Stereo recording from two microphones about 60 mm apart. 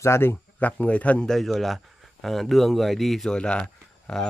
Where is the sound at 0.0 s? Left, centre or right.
Left.